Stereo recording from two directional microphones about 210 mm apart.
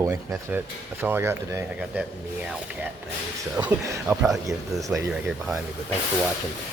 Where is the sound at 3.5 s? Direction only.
10° right (ahead or behind).